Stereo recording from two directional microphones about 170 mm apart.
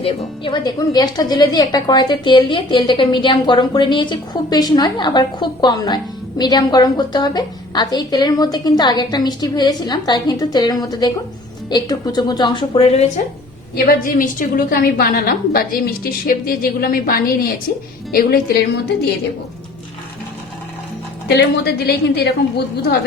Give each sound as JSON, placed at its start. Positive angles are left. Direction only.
{"t": 0.0, "sound": "speech", "side_deg": 30}
{"t": 13.7, "sound": "a woman's voice", "side_deg": 55}
{"t": 21.2, "sound": "a woman's voice", "side_deg": 70}